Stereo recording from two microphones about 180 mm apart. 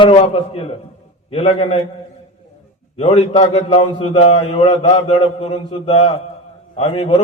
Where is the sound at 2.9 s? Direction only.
40° left (ahead or behind).